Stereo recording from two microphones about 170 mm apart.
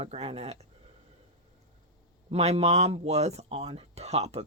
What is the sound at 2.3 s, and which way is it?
Speech, 40° right (ahead or behind).